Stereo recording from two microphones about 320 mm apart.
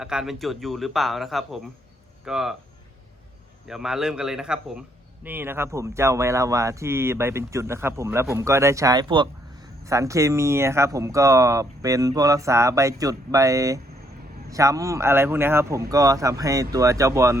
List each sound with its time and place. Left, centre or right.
0.0 s speech: centre
3.7 s a man's voice: centre